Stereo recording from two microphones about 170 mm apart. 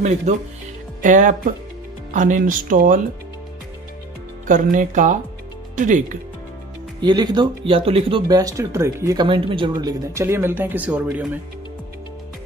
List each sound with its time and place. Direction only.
0.0 s speech: 45° right (ahead or behind)
4.5 s speech: 50° right (ahead or behind)
7.0 s speech: 25° right (ahead or behind); by 11.3 s 10° right (ahead or behind)